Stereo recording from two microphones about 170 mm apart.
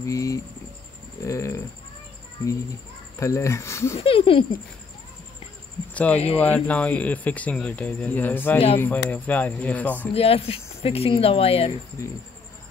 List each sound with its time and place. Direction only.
0.0 s speech: 20° left (ahead or behind)
3.2 s speech: 15° left (ahead or behind)
4.0 s speech: 30° left (ahead or behind)
6.1 s speech: 40° left (ahead or behind)
6.4 s speech: 10° left (ahead or behind)
10.1 s speech: 35° left (ahead or behind)